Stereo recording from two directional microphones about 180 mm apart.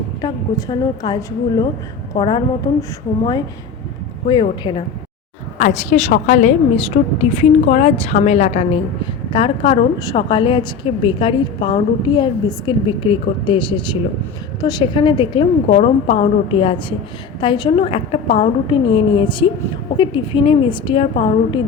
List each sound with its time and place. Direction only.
0.2 s a woman's voice: 25° left (ahead or behind)
4.3 s a woman's voice: 25° left (ahead or behind)
5.5 s a woman's voice: 40° left (ahead or behind)